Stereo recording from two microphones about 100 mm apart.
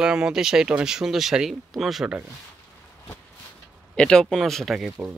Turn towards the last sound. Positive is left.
turn(degrees=0)  # may be behind; listen again after turning